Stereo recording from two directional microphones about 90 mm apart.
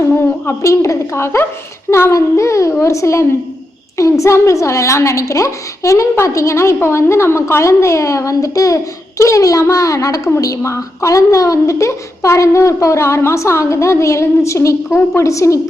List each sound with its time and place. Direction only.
0.2 s a woman's voice: 30° left (ahead or behind)